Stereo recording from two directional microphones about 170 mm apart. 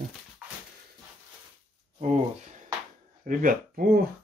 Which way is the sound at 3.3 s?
50° right (ahead or behind).